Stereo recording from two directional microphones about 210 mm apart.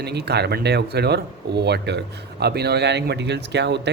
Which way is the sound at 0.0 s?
50° right (ahead or behind).